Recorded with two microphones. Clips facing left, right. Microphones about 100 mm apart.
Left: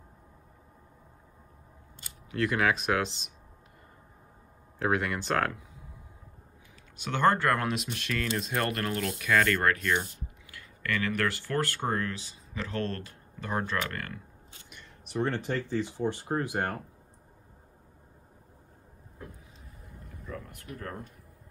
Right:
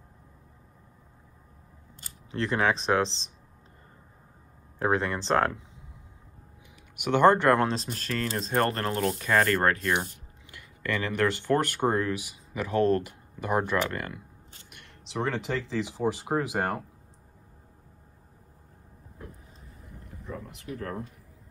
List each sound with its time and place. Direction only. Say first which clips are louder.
2.3 s speech: right 1 dB; 30° right (ahead or behind)
4.8 s speech: right 2 dB; 30° right (ahead or behind)
7.0 s speech: right 5 dB; 20° right (ahead or behind); by 9.9 s 35° right (ahead or behind)
10.5 s speech: right 2 dB; 20° right (ahead or behind)
14.7 s speech: left 1 dB; 80° right